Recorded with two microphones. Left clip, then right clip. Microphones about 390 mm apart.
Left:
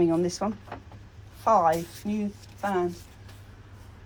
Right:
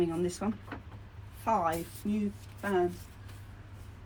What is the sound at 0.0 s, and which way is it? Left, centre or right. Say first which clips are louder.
Speech: left 7 dB; centre.